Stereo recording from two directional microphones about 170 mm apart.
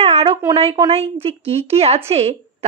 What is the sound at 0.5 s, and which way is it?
Speech, 30° right (ahead or behind).